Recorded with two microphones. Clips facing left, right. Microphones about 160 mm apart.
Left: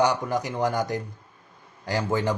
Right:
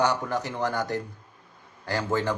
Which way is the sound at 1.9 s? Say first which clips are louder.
Left 1 dB; 15° left (ahead or behind).